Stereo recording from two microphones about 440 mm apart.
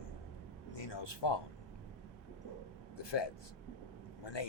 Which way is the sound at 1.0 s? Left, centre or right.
Left.